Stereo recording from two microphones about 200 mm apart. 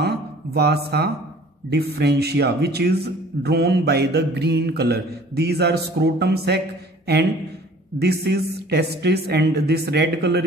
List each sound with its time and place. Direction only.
0.0 s a sound: 50° right (ahead or behind)
1.7 s a man's voice: 55° right (ahead or behind)
8.0 s a man's voice: 55° right (ahead or behind)